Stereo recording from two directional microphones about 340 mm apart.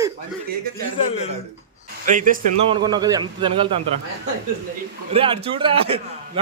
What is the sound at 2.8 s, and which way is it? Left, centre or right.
Snicker, centre.